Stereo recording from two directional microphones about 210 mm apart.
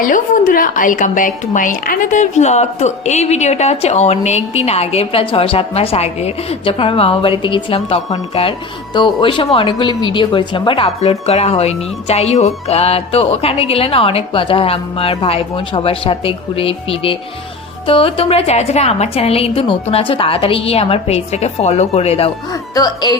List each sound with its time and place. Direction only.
0.0 s a woman's voice: 40° left (ahead or behind); by 23.1 s 20° left (ahead or behind)